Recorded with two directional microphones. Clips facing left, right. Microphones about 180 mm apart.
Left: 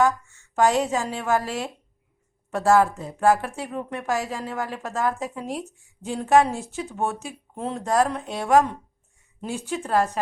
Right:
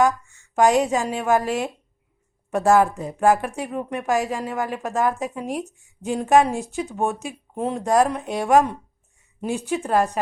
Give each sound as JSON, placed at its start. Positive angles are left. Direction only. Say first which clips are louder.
{"t": 0.0, "sound": "a woman's voice", "louder": "right 2 dB", "side_deg": -15}